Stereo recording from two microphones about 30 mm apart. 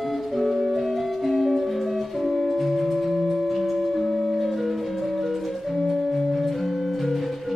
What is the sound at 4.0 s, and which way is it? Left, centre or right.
Music, centre.